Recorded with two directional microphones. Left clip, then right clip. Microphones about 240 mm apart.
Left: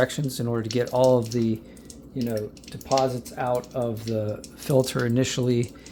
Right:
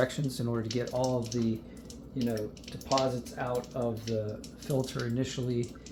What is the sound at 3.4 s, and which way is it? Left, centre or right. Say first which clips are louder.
Speech: left 7 dB; left.